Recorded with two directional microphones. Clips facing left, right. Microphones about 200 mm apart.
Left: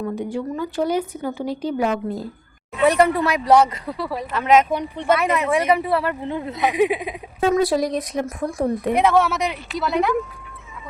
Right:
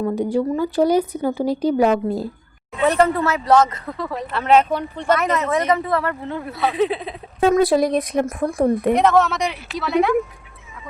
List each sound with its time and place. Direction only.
0.0 s a woman's voice: 40° right (ahead or behind)
2.8 s a man's voice: 10° left (ahead or behind)
7.5 s speech: 55° right (ahead or behind)
9.0 s a woman's voice: 10° left (ahead or behind)